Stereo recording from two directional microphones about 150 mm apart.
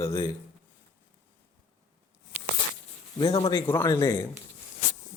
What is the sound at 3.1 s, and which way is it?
Speech, 35° left (ahead or behind).